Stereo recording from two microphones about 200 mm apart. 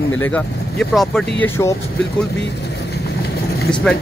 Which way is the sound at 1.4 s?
15° left (ahead or behind).